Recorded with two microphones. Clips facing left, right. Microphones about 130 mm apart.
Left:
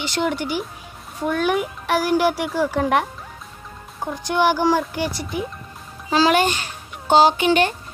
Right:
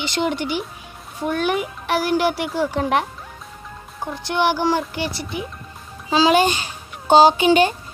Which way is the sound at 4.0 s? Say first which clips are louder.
Left 1 dB; 10° left (ahead or behind).